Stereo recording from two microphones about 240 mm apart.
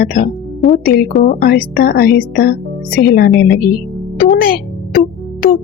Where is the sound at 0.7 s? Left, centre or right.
Left.